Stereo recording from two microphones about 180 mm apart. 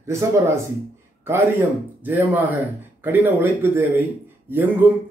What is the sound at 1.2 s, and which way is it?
Speech, 15° right (ahead or behind).